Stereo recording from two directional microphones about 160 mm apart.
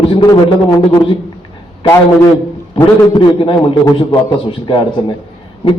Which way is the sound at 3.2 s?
25° left (ahead or behind).